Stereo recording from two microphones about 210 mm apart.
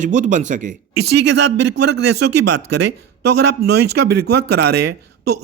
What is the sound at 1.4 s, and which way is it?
A man's voice, 55° right (ahead or behind).